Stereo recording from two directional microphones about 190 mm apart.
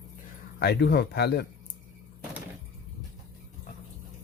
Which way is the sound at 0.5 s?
60° left (ahead or behind).